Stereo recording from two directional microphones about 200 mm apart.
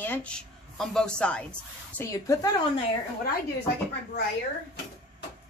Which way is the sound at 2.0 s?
15° left (ahead or behind).